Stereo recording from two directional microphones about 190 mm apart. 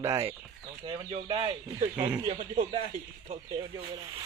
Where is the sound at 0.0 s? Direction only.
15° right (ahead or behind).